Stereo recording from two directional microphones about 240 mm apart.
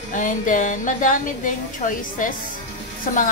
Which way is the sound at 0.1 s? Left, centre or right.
Left.